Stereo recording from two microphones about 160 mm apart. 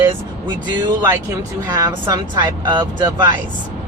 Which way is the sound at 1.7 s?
25° right (ahead or behind).